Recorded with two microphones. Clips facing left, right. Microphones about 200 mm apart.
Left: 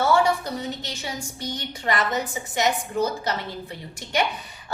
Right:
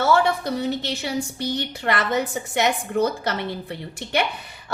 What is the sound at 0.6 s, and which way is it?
A woman's voice, 65° right (ahead or behind).